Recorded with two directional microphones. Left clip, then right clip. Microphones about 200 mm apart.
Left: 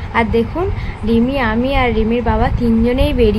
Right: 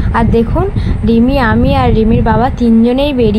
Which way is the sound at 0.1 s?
20° right (ahead or behind).